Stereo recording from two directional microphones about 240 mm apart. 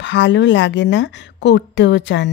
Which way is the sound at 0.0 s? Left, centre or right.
Left.